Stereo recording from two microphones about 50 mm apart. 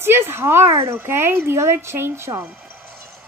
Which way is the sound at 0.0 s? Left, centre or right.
Right.